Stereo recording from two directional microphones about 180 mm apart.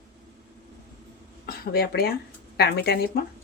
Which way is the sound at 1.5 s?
60° left (ahead or behind).